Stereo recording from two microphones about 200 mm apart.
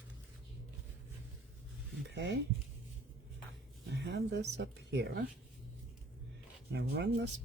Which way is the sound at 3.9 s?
55° right (ahead or behind).